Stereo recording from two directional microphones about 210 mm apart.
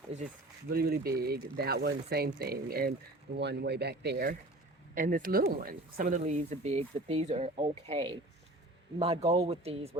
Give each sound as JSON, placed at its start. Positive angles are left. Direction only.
{"t": 0.7, "sound": "speech", "side_deg": -45}